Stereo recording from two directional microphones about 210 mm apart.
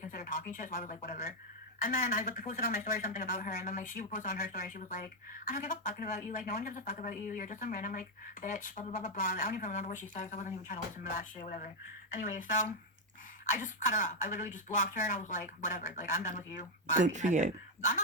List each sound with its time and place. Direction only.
0.0 s speech: 40° left (ahead or behind)
17.0 s speech: 35° right (ahead or behind)